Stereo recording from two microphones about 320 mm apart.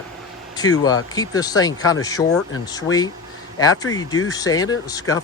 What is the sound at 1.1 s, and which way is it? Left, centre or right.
A man's voice, centre.